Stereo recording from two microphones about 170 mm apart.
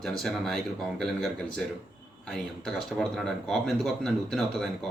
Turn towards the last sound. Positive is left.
turn(degrees=5)  # may be behind; listen again after turning